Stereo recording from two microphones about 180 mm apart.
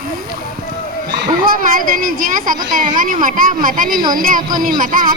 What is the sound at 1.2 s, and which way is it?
Speech, 50° right (ahead or behind).